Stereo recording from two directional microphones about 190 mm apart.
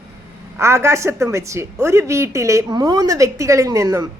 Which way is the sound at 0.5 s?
15° right (ahead or behind).